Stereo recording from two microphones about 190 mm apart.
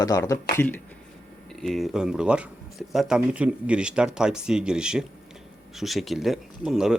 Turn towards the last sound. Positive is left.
turn(degrees=0)  # may be behind; listen again after turning